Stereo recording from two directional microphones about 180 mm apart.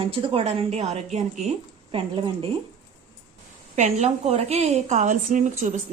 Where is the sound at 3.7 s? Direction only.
40° right (ahead or behind).